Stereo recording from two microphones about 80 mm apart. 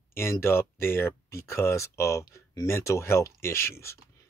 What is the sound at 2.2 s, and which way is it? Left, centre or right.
Speech, left.